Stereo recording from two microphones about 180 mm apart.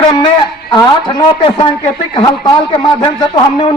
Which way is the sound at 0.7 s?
25° left (ahead or behind).